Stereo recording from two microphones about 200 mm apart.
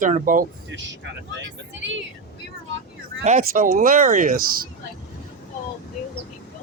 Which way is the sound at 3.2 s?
45° right (ahead or behind).